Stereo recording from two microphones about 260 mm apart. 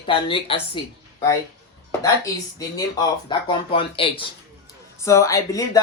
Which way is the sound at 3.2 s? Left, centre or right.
Centre.